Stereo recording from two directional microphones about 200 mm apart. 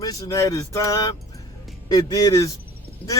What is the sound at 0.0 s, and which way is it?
A man's voice, 15° left (ahead or behind).